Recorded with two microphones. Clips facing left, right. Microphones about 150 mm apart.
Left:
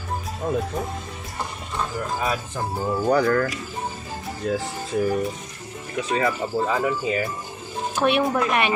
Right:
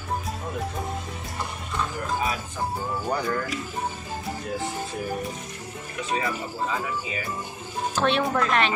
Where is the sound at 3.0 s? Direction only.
90° left.